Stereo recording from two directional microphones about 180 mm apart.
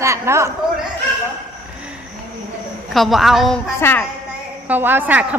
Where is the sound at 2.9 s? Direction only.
Centre (ahead or behind).